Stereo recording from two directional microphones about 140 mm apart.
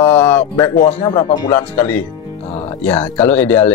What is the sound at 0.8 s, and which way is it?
Speech, 35° left (ahead or behind).